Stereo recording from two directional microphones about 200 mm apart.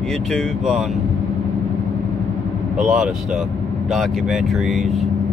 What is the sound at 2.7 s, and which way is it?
Speech, 5° right (ahead or behind).